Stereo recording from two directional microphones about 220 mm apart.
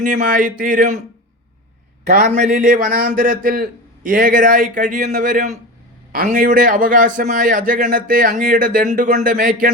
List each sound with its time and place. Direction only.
0.0 s a man's voice: 35° right (ahead or behind)
2.0 s a man's voice: 40° right (ahead or behind)